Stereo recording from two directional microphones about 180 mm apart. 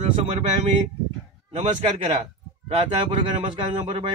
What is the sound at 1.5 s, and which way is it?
A man's voice, 40° right (ahead or behind).